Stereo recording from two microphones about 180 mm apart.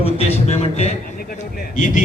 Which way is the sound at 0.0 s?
35° left (ahead or behind).